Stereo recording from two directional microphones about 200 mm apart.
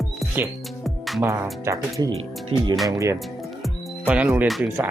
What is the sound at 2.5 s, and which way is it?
Speech, 30° right (ahead or behind).